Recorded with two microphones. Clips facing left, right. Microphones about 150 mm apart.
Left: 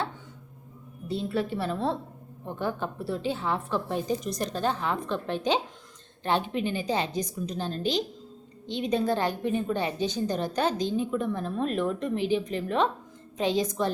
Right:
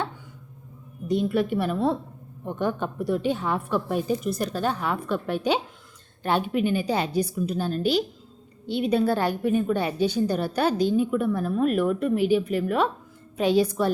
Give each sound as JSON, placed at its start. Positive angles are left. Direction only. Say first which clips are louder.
{"t": 1.0, "sound": "a woman's voice", "louder": "right 6 dB", "side_deg": -15}